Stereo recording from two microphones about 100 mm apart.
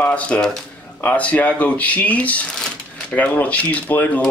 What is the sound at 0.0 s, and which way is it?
Speech, 10° left (ahead or behind).